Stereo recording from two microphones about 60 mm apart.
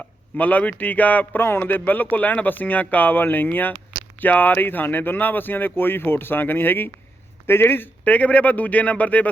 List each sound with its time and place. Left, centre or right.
0.3 s speech: left